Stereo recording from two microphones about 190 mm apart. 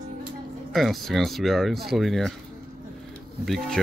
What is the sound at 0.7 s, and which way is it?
Speech, centre (ahead or behind).